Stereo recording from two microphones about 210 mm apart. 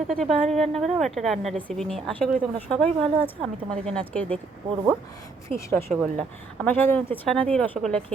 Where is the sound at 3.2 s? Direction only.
25° right (ahead or behind).